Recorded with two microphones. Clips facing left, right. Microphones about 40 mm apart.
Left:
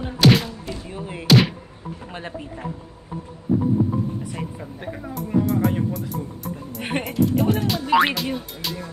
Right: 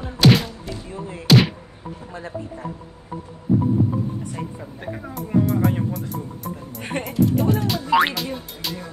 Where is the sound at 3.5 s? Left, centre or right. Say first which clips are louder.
Right 1 dB; right.